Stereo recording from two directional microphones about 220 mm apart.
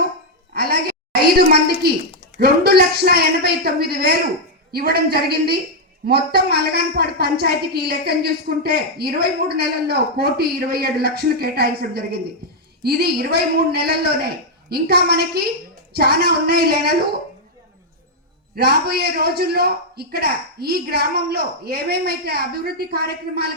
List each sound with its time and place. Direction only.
0.5 s a sound: 45° right (ahead or behind)
2.4 s a woman's voice: 45° right (ahead or behind)
18.5 s a woman's voice: 45° right (ahead or behind)